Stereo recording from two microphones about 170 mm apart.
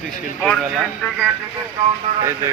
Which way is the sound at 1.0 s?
5° left (ahead or behind).